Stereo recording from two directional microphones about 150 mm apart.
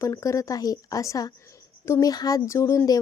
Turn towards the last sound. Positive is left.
turn(degrees=25)  # may be behind; listen again after turning